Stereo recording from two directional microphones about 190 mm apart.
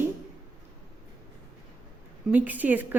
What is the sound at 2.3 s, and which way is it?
Speech, 10° right (ahead or behind).